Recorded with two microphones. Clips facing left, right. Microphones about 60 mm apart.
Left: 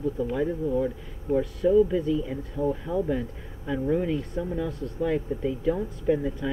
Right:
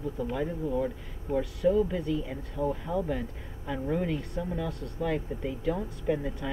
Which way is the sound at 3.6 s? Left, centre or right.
Centre.